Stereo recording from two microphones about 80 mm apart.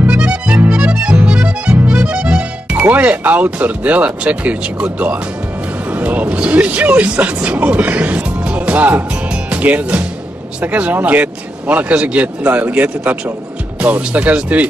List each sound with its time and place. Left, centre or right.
0.0 s music: centre
1.9 s speech: centre